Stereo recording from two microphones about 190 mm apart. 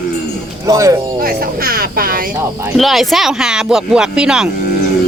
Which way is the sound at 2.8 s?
Centre (ahead or behind).